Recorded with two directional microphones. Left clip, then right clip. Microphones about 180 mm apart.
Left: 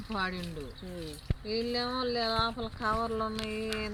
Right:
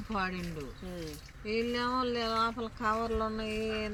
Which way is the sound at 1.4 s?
45° right (ahead or behind).